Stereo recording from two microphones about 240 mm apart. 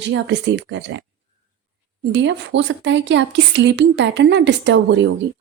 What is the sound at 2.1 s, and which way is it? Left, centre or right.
A woman's voice, right.